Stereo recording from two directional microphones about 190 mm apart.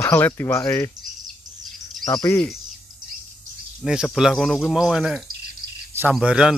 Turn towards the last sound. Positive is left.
turn(degrees=-5)  # may be behind; listen again after turning